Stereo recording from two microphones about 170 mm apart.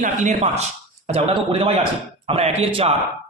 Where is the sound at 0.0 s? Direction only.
45° right (ahead or behind).